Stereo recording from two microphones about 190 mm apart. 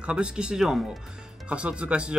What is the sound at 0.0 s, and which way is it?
Speech, 5° right (ahead or behind).